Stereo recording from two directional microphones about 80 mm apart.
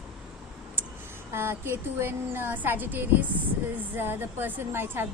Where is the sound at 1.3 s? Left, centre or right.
Right.